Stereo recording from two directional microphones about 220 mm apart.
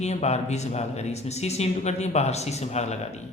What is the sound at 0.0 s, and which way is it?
Speech, 30° left (ahead or behind).